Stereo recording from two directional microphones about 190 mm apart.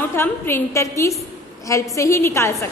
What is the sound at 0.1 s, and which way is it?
A woman's voice, 10° left (ahead or behind).